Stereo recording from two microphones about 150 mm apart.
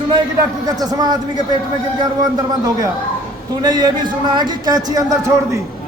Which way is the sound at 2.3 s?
25° right (ahead or behind).